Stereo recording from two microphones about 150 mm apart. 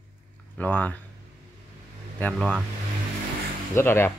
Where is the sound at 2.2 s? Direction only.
5° left (ahead or behind).